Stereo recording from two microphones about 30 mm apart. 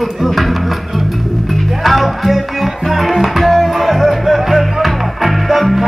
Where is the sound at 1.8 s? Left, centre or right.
Centre.